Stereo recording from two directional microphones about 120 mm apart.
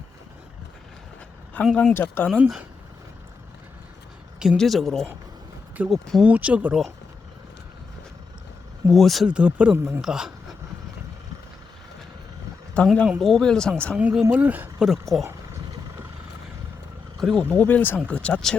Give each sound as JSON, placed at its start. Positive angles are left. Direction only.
{"t": 1.6, "sound": "speech", "side_deg": 15}
{"t": 2.4, "sound": "speech", "side_deg": -10}
{"t": 4.5, "sound": "speech", "side_deg": 0}
{"t": 6.2, "sound": "speech", "side_deg": -10}
{"t": 8.9, "sound": "speech", "side_deg": 0}
{"t": 12.7, "sound": "speech", "side_deg": 10}
{"t": 14.0, "sound": "speech", "side_deg": -10}
{"t": 15.2, "sound": "dog", "side_deg": -25}
{"t": 17.2, "sound": "speech", "side_deg": 5}
{"t": 17.5, "sound": "speech", "side_deg": 15}